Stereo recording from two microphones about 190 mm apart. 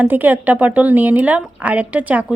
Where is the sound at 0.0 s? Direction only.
10° right (ahead or behind).